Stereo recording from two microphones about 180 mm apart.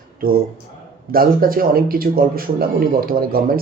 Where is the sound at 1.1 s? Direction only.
55° right (ahead or behind).